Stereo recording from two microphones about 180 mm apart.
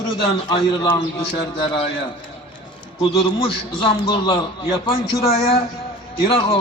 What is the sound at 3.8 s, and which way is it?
A man's voice, 25° left (ahead or behind).